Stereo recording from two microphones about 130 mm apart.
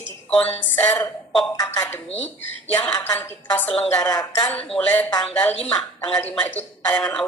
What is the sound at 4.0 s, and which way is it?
Speech, 30° left (ahead or behind).